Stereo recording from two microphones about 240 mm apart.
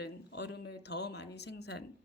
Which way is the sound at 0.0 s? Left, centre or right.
Left.